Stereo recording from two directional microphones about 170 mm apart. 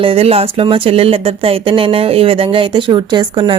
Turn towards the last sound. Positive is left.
turn(degrees=-30)  # may be behind; listen again after turning